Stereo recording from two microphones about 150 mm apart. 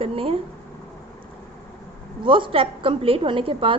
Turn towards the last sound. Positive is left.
turn(degrees=-35)  # may be behind; listen again after turning